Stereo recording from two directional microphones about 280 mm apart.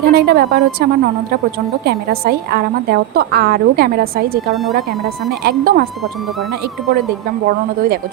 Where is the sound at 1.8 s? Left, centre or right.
Right.